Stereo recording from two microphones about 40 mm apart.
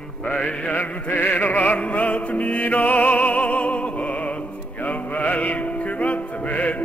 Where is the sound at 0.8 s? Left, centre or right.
Left.